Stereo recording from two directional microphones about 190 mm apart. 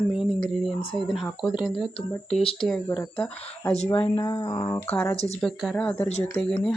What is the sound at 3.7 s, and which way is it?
Speech, 30° left (ahead or behind).